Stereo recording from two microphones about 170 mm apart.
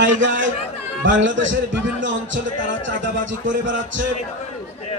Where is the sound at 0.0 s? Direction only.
90° right.